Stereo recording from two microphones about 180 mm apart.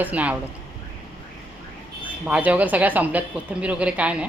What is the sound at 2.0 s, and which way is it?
Speech, 10° right (ahead or behind).